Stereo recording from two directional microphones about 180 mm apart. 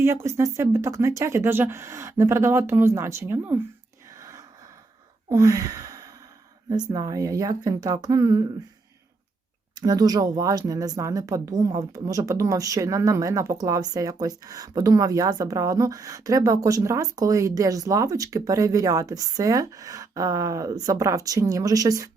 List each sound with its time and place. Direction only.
0.0 s speech: 15° right (ahead or behind)
4.2 s gasp: 20° right (ahead or behind)
5.3 s sigh: 20° right (ahead or behind)
6.7 s speech: 20° right (ahead or behind)
9.7 s speech: 20° right (ahead or behind)